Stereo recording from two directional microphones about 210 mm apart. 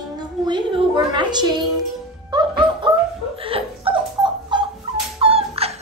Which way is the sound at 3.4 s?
25° right (ahead or behind).